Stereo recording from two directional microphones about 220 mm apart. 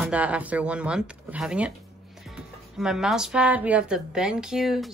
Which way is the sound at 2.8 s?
Centre (ahead or behind).